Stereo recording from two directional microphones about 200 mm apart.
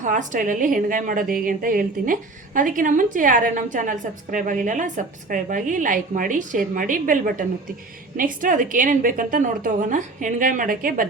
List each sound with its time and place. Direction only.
0.0 s a woman's voice: 40° right (ahead or behind)